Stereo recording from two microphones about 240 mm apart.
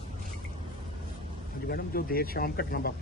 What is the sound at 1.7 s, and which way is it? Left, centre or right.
A man's voice, left.